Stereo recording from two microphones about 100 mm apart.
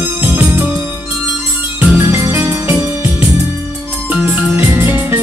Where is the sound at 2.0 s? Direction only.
25° right (ahead or behind).